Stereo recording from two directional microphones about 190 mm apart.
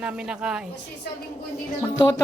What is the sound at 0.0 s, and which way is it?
Speech, 5° right (ahead or behind).